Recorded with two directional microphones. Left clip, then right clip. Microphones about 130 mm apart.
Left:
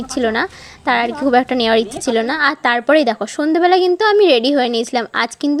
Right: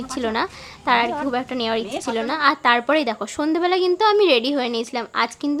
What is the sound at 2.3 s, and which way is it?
A woman's voice, 35° left (ahead or behind).